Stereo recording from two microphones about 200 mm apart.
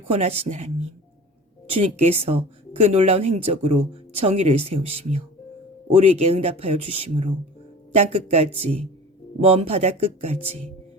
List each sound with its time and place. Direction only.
0.1 s speech: 30° right (ahead or behind)
1.7 s speech: 30° right (ahead or behind)